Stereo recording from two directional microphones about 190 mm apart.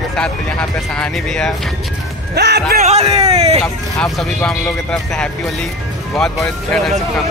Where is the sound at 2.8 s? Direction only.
35° right (ahead or behind).